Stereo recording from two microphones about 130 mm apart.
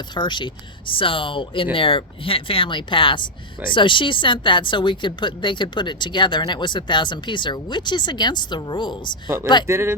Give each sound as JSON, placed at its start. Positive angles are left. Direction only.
{"t": 0.1, "sound": "speech", "side_deg": 35}
{"t": 9.6, "sound": "speech", "side_deg": -20}